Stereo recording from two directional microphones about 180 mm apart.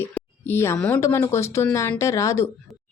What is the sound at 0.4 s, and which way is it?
A woman's voice, 15° left (ahead or behind).